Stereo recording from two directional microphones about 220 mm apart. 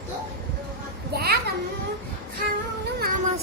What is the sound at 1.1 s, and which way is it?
Children playing, 45° right (ahead or behind).